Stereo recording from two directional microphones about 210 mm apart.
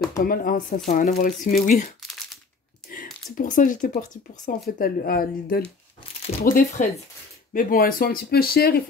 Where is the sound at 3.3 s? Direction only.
40° left (ahead or behind).